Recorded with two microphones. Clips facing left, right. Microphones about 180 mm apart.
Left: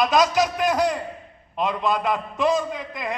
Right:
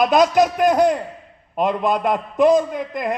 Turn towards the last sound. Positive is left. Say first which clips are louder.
# right 6 dB
turn(degrees=-50)  # may be behind; listen again after turning